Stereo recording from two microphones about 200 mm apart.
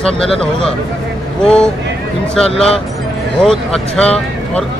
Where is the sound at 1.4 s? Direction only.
5° left (ahead or behind).